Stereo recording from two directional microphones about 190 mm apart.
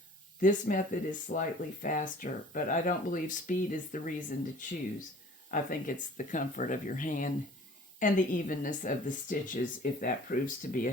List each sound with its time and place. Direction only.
0.4 s speech: 45° left (ahead or behind)